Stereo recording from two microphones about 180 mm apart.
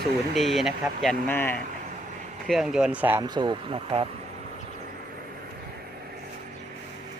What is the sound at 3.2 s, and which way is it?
Speech, 25° right (ahead or behind).